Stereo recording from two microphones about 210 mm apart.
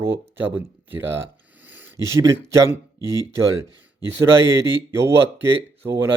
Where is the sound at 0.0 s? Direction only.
10° right (ahead or behind).